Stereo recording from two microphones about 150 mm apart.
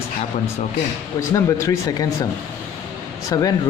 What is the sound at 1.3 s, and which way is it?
Speech, 20° left (ahead or behind).